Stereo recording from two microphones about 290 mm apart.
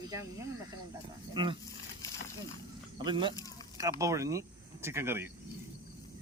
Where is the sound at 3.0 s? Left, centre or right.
Centre.